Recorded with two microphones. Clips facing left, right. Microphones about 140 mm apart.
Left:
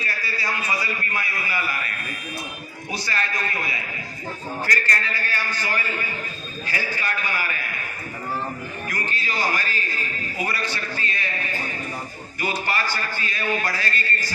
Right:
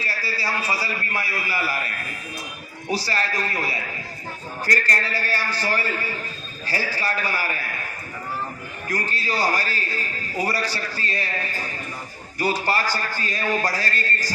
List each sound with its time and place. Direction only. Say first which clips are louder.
0.0 s speech: right 1 dB; 30° right (ahead or behind)
2.9 s speech: right 3 dB; 35° right (ahead or behind)
8.9 s speech: right 5 dB; 40° right (ahead or behind)
12.4 s speech: right 3 dB; 35° right (ahead or behind)